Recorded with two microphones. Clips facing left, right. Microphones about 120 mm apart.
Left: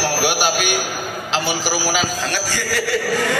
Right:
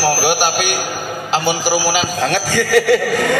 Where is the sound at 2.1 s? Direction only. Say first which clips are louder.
Right 7 dB; 60° right (ahead or behind).